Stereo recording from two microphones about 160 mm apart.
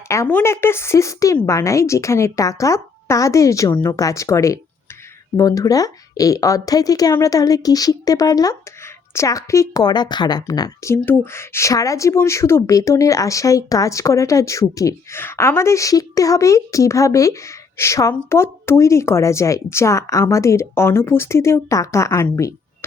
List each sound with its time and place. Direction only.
0.1 s a woman's voice: 15° left (ahead or behind)